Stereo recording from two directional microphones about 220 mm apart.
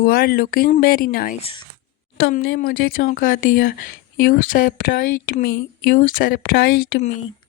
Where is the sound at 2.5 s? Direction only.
40° left (ahead or behind).